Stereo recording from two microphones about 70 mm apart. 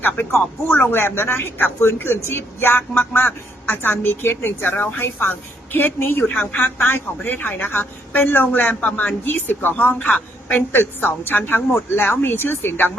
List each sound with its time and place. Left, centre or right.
0.0 s a woman's voice: left
9.2 s a woman's voice: left